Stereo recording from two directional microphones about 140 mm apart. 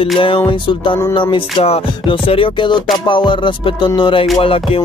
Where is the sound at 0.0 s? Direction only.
40° left (ahead or behind).